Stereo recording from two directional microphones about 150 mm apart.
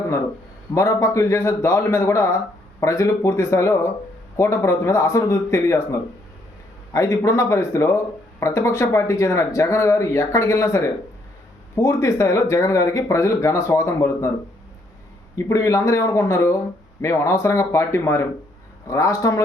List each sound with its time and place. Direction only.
0.7 s speech: 20° left (ahead or behind)
15.4 s speech: 20° left (ahead or behind)